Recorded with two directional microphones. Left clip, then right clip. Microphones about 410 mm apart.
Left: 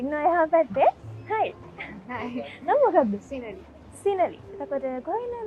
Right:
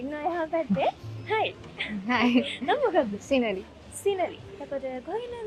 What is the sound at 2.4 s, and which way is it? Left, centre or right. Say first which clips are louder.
Speech: left 4 dB; left.